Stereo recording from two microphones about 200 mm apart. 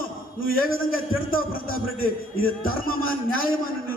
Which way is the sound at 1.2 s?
45° left (ahead or behind).